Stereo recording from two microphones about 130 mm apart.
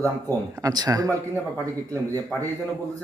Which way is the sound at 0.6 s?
30° right (ahead or behind).